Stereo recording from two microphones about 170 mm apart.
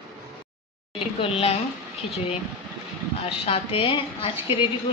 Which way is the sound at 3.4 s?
35° left (ahead or behind).